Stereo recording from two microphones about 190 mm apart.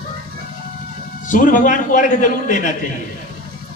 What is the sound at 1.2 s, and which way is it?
A man's voice, 45° left (ahead or behind).